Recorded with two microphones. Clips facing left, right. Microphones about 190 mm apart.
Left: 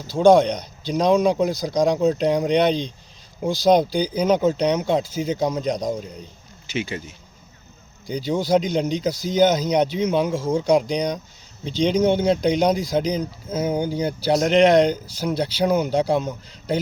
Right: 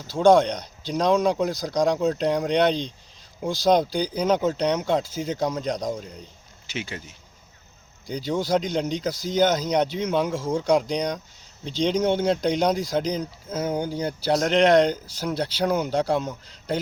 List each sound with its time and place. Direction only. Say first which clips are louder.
0.1 s speech: left 3 dB; 5° left (ahead or behind)
4.1 s speech: left 3 dB; 15° left (ahead or behind)
6.7 s speech: left 6 dB; centre (ahead or behind)
8.0 s speech: left 3 dB; 5° left (ahead or behind)
13.7 s speech: left 3 dB; 5° left (ahead or behind)